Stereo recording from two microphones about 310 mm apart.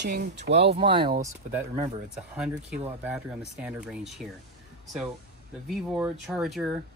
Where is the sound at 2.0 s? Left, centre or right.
Centre.